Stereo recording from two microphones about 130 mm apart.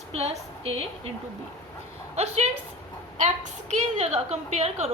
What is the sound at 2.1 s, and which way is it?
Speech, 55° right (ahead or behind).